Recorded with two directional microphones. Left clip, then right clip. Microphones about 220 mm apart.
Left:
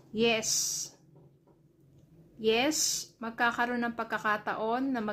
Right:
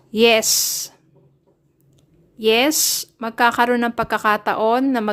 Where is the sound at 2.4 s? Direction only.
45° right (ahead or behind).